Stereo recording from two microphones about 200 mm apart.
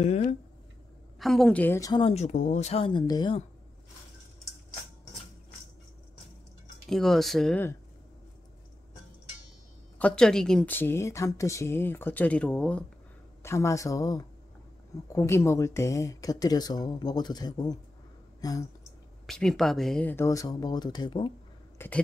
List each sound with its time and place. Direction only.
0.0 s speech: 30° left (ahead or behind)
1.2 s speech: centre (ahead or behind); by 3.4 s 20° left (ahead or behind)
6.9 s speech: centre (ahead or behind)
9.9 s a woman's voice: 5° left (ahead or behind)
19.2 s a woman's voice: 5° left (ahead or behind); by 21.3 s 25° left (ahead or behind)
21.7 s a sound: 10° left (ahead or behind)